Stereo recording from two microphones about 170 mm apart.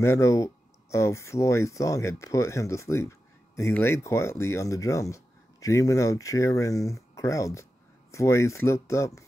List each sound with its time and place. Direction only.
0.0 s speech: 15° left (ahead or behind)